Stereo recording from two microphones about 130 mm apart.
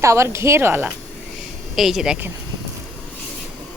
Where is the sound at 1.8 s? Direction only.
Centre (ahead or behind).